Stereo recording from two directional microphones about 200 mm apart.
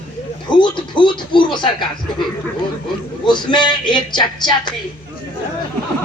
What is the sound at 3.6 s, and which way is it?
Speech, 20° left (ahead or behind).